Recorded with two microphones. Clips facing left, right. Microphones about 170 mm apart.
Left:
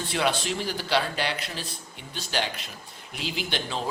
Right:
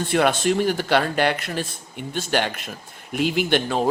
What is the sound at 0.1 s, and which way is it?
A man's voice, 50° right (ahead or behind).